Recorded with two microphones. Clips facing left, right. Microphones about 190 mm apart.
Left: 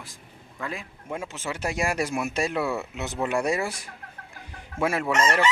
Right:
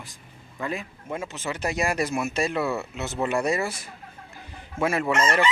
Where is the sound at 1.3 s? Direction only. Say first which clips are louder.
Right 2 dB; 10° left (ahead or behind).